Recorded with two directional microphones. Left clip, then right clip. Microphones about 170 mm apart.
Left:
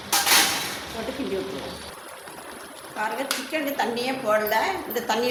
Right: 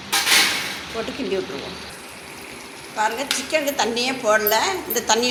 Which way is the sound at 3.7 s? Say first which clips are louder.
Right 4 dB; 15° right (ahead or behind).